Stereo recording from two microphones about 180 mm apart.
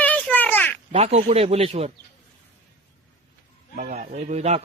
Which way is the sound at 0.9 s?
35° right (ahead or behind).